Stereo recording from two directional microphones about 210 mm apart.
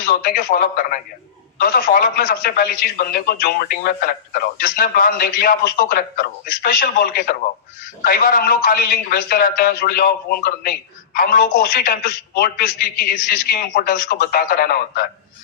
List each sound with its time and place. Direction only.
0.0 s a man's voice: 45° left (ahead or behind)